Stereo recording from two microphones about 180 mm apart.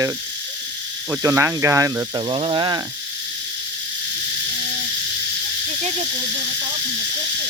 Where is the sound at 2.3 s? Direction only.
30° right (ahead or behind).